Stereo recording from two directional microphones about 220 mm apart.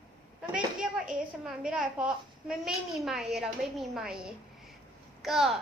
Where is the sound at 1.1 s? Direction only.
5° right (ahead or behind).